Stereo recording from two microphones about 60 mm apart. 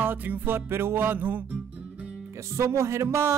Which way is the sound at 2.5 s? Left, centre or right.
Right.